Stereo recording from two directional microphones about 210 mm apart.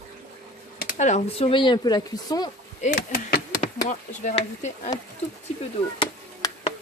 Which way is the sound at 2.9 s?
45° left (ahead or behind).